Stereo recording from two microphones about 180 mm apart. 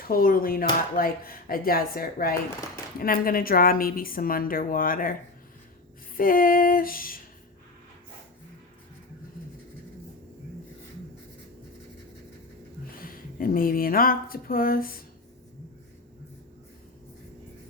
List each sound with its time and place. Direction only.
0.1 s speech: 55° left (ahead or behind)
6.1 s speech: 50° left (ahead or behind)
13.0 s speech: 55° left (ahead or behind)